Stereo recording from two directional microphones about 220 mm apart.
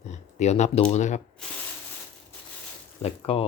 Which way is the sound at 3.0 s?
25° left (ahead or behind).